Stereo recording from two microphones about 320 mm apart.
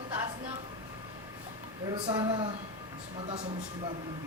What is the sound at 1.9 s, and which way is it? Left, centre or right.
Speech, centre.